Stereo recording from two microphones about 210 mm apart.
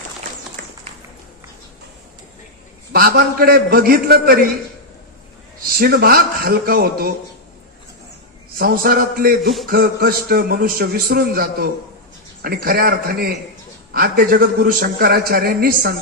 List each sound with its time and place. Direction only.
2.9 s a man's voice: 45° right (ahead or behind)
5.7 s a man's voice: 45° right (ahead or behind)
8.5 s a man's voice: 45° right (ahead or behind)